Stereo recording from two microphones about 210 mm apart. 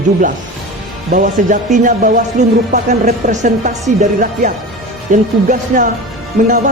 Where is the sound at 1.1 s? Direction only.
40° right (ahead or behind).